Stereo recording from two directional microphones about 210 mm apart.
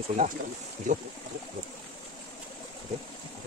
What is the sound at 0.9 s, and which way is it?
Speech, 35° right (ahead or behind).